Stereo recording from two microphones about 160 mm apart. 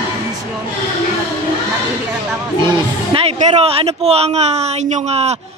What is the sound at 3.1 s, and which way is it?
Speech, 40° right (ahead or behind).